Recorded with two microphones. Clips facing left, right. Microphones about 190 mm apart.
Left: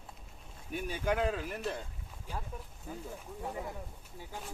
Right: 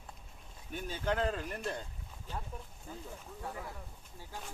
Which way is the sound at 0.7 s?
10° left (ahead or behind).